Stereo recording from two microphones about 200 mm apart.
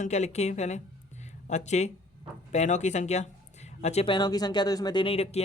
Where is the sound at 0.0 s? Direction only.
35° left (ahead or behind).